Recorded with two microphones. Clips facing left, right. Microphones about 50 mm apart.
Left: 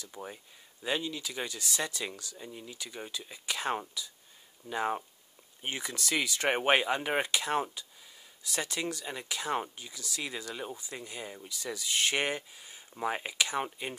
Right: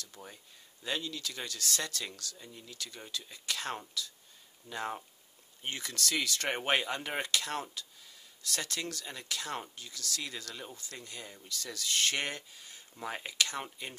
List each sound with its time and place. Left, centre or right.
0.0 s speech: centre